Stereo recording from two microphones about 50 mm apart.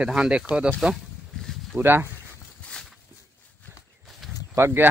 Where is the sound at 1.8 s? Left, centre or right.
Right.